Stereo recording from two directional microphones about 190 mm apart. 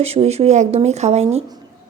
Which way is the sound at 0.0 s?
35° right (ahead or behind).